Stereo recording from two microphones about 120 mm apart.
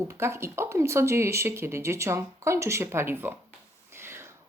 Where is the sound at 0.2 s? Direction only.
20° right (ahead or behind).